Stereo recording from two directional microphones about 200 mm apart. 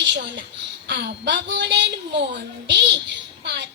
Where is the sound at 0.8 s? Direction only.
60° right (ahead or behind).